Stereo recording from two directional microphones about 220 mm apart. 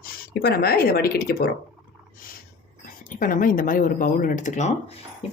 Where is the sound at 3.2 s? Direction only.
40° left (ahead or behind).